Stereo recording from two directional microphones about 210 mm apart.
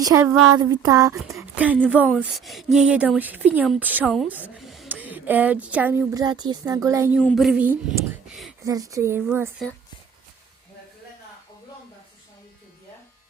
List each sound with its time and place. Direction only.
0.0 s speech: 15° right (ahead or behind)
7.2 s speech: 5° left (ahead or behind)
8.6 s speech: 15° right (ahead or behind)